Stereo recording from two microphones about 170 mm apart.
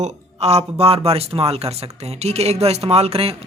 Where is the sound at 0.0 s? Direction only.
40° right (ahead or behind).